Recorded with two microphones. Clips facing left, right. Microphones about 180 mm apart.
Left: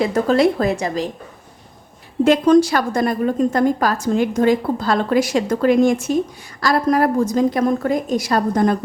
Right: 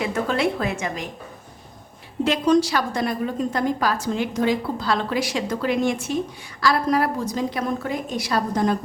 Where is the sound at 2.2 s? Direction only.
50° left (ahead or behind).